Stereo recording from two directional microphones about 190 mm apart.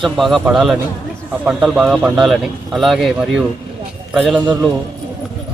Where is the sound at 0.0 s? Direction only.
Centre (ahead or behind).